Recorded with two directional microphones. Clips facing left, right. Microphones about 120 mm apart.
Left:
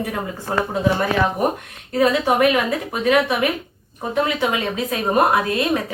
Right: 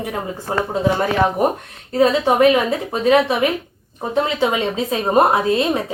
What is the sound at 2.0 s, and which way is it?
Speech, 30° right (ahead or behind).